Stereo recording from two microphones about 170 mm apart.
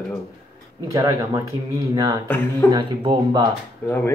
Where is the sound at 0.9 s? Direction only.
20° right (ahead or behind).